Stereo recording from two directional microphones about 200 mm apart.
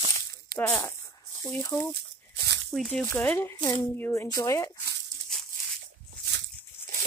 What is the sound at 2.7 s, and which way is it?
Speech, 5° left (ahead or behind).